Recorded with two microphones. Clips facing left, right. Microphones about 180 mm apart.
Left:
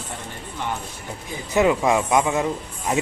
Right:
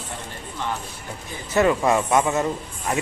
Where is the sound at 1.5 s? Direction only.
15° left (ahead or behind).